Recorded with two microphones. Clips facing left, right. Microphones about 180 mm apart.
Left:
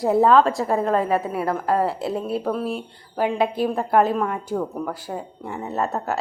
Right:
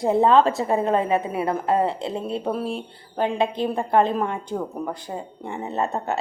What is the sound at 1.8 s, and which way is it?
Speech, 5° left (ahead or behind).